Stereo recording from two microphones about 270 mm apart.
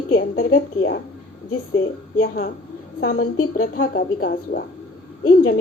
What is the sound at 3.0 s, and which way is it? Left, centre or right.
A woman's voice, left.